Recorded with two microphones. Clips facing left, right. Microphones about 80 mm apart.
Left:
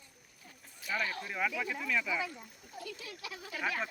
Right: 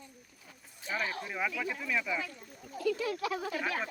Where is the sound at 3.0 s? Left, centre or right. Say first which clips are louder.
Right 13 dB; right.